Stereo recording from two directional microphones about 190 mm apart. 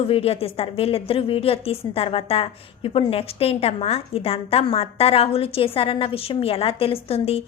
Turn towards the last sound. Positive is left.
turn(degrees=30)  # may be behind; listen again after turning